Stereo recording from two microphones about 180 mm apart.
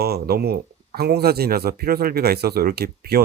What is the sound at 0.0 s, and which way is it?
Speech, 60° right (ahead or behind).